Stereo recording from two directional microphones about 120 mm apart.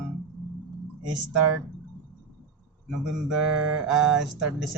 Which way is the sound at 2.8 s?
5° right (ahead or behind).